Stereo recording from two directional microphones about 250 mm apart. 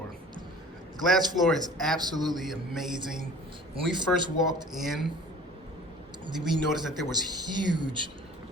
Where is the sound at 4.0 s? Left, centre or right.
Centre.